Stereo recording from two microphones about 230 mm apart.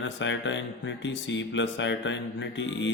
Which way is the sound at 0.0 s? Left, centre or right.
Left.